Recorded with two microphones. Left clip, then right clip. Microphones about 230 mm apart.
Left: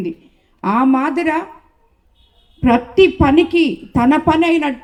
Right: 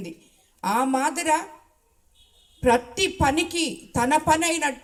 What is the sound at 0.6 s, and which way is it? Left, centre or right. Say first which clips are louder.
Speech: left 7 dB; right.